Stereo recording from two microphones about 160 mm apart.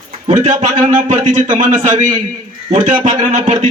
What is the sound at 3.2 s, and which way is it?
Speech, 50° right (ahead or behind).